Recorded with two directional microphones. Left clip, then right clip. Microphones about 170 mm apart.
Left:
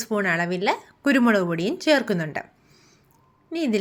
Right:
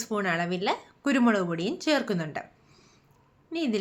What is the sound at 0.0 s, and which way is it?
A woman's voice, 20° left (ahead or behind).